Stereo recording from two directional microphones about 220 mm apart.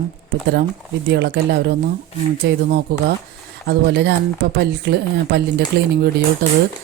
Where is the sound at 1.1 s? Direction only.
50° right (ahead or behind).